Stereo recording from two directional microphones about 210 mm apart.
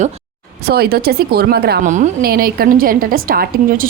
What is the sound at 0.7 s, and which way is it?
A woman's voice, 45° right (ahead or behind).